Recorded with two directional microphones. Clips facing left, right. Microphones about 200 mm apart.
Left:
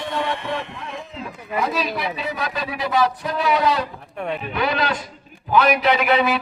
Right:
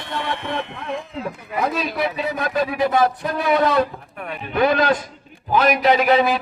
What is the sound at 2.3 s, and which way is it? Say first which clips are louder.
A man's voice: right 5 dB; 50° right (ahead or behind).